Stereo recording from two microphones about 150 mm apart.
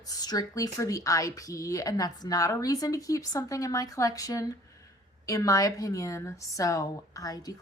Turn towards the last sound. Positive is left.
turn(degrees=25)  # may be behind; listen again after turning